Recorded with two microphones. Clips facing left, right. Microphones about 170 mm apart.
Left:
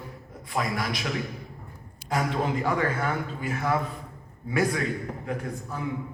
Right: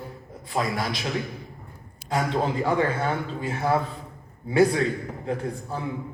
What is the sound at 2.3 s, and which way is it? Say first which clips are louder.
A man's voice: right 4 dB; 30° right (ahead or behind).